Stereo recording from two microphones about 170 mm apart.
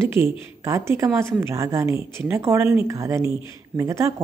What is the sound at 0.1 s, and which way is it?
Speech, 15° right (ahead or behind).